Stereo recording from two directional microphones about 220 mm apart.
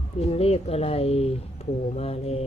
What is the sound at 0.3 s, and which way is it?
Speech, 25° left (ahead or behind).